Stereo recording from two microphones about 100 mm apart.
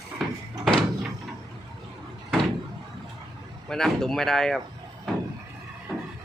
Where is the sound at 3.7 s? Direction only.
5° left (ahead or behind).